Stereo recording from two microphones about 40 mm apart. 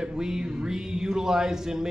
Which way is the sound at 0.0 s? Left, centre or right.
Centre.